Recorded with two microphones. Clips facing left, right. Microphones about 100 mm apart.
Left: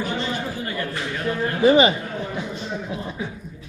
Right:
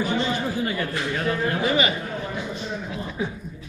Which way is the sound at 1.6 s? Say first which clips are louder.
Left 10 dB; 25° left (ahead or behind).